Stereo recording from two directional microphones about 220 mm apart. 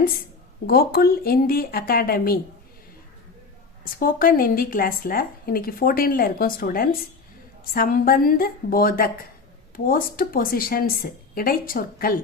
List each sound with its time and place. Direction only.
0.7 s speech: 45° left (ahead or behind)
4.0 s speech: 40° left (ahead or behind)